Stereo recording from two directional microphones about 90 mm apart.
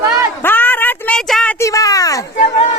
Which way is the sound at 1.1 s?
10° left (ahead or behind).